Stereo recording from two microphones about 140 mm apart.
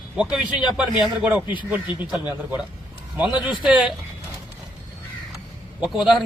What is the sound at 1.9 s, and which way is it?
Speech, 35° left (ahead or behind).